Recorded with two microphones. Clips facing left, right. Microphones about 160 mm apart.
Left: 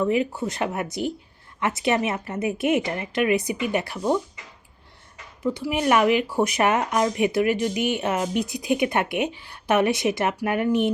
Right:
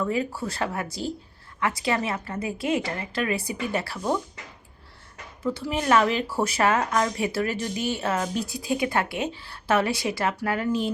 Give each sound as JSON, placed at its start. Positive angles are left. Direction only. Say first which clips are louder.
{"t": 0.0, "sound": "a woman's voice", "louder": "left 4 dB", "side_deg": 20}
{"t": 5.4, "sound": "speech", "louder": "left 3 dB", "side_deg": 15}